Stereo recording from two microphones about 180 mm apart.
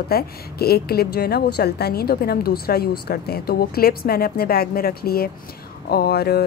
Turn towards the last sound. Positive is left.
turn(degrees=60)  # may be behind; listen again after turning